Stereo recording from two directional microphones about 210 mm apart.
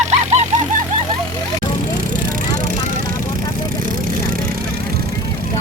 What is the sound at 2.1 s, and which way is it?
Vehicle, 40° right (ahead or behind).